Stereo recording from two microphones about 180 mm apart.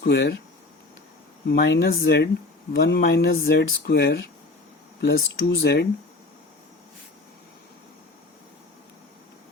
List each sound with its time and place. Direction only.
0.0 s speech: 65° left (ahead or behind)
1.5 s speech: 70° left (ahead or behind)